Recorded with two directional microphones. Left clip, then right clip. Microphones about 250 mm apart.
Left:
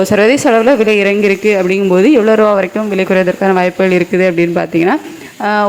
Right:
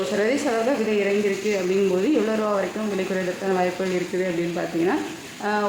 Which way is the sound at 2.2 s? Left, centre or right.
Left.